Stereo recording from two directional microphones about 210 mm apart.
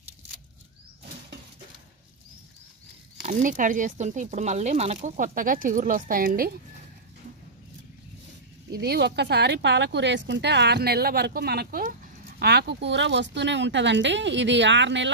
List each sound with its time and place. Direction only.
3.3 s speech: 40° right (ahead or behind)
8.7 s speech: 50° right (ahead or behind)